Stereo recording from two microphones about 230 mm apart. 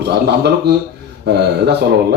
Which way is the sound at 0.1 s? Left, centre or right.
Right.